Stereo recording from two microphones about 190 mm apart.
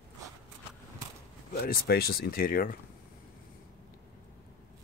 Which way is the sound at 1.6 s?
55° left (ahead or behind).